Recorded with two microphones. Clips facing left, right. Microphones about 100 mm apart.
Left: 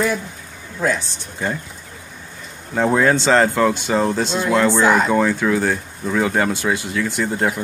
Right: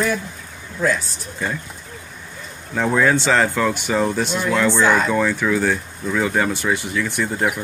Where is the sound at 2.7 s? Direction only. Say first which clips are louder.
Left 1 dB; 20° left (ahead or behind).